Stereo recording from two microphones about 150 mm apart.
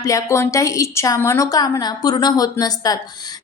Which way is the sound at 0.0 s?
20° left (ahead or behind).